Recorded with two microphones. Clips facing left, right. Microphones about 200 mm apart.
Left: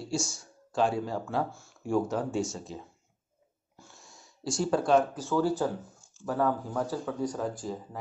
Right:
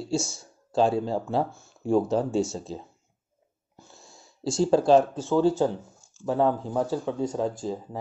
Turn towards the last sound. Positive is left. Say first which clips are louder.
# right 4 dB
turn(degrees=-25)  # may be behind; listen again after turning